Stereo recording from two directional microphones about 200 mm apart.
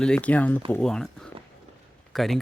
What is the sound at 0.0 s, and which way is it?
Speech, 5° left (ahead or behind).